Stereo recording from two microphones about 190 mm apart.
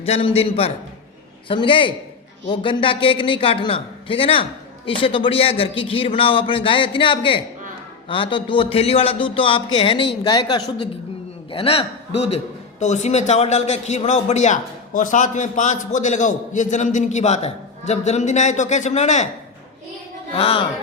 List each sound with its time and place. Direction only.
0.0 s a man's voice: 30° left (ahead or behind)
20.3 s a man's voice: 30° left (ahead or behind)